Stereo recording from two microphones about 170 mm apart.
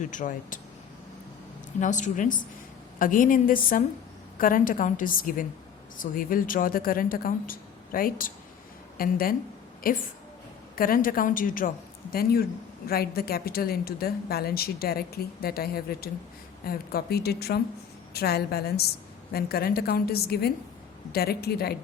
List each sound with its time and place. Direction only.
0.1 s a woman's voice: 50° left (ahead or behind)
1.8 s a woman's voice: 45° left (ahead or behind); by 21.8 s 65° left (ahead or behind)